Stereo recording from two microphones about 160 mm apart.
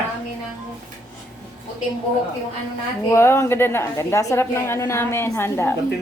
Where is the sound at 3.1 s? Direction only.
15° left (ahead or behind).